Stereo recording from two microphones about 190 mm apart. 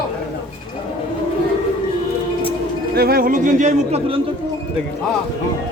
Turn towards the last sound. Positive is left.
turn(degrees=-35)  # may be behind; listen again after turning